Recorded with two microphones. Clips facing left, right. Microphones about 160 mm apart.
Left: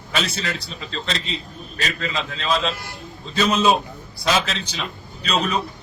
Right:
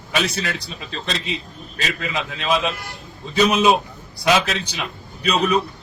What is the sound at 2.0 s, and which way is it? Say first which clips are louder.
A man's voice: right 1 dB; 15° right (ahead or behind).